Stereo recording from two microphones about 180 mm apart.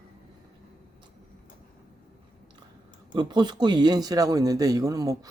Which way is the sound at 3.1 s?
25° right (ahead or behind).